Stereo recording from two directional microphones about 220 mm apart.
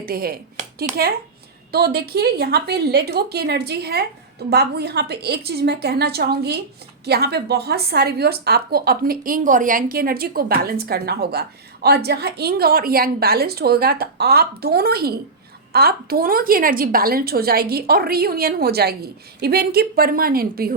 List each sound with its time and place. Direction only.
0.0 s a woman's voice: 40° right (ahead or behind)